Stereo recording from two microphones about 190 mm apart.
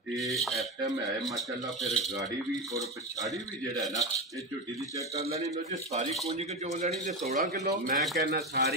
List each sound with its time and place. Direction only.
0.1 s speech: centre (ahead or behind)
2.7 s speech: 15° right (ahead or behind)
5.2 s speech: 35° right (ahead or behind)
7.6 s a man's voice: 50° right (ahead or behind)